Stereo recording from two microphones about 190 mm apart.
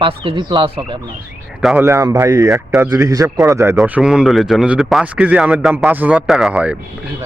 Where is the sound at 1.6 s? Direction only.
Centre (ahead or behind).